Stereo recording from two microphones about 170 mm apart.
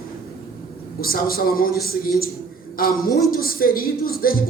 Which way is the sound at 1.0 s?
60° left (ahead or behind).